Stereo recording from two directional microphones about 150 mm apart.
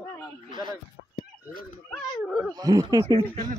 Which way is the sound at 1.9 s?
Centre (ahead or behind).